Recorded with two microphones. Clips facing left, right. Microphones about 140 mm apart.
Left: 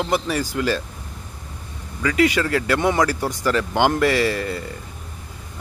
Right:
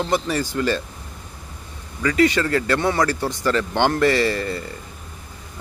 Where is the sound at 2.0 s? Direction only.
5° left (ahead or behind).